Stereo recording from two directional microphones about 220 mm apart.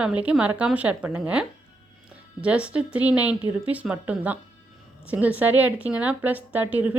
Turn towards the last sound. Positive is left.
turn(degrees=-5)  # may be behind; listen again after turning